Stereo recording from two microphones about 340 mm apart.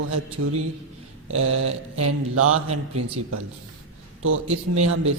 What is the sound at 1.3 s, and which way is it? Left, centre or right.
A man's voice, right.